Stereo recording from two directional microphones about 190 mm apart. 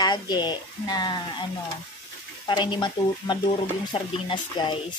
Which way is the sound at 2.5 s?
25° left (ahead or behind).